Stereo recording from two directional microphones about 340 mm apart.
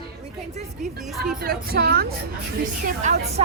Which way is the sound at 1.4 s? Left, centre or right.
Right.